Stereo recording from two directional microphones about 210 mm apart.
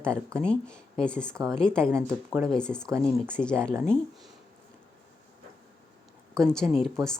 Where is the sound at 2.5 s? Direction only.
5° left (ahead or behind).